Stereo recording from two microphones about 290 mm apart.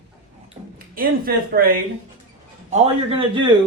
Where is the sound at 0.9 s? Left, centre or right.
Right.